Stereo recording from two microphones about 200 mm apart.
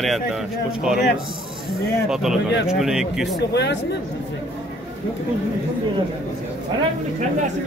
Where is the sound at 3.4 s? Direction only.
55° left (ahead or behind).